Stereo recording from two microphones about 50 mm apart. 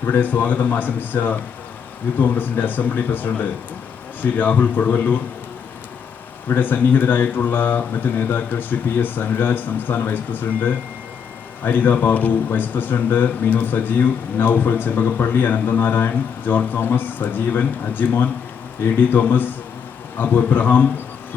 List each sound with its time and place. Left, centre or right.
0.0 s speech: left
6.5 s speech: left